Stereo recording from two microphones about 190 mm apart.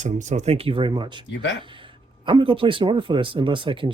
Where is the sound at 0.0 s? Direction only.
40° right (ahead or behind).